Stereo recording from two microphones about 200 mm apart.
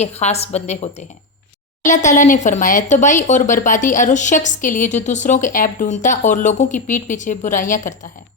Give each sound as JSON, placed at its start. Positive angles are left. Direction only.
{"t": 0.0, "sound": "speech", "side_deg": 35}